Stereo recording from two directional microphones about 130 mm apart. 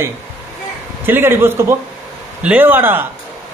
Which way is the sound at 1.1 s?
15° right (ahead or behind).